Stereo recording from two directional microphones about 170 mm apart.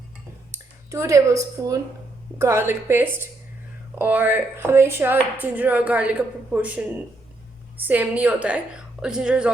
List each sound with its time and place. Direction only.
0.5 s a woman's voice: 15° right (ahead or behind)